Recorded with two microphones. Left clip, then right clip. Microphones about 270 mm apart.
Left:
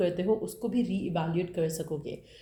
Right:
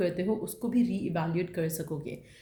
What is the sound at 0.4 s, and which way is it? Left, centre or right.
Speech, right.